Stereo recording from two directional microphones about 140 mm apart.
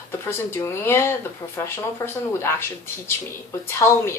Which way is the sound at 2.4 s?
15° left (ahead or behind).